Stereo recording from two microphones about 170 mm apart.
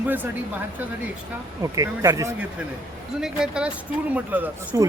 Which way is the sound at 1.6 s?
20° right (ahead or behind).